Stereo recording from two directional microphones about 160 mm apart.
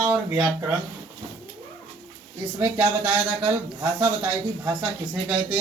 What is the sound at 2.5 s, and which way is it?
Speech, 15° right (ahead or behind).